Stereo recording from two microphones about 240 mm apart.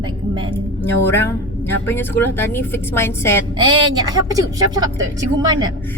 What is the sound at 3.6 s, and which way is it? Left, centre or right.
Speech, centre.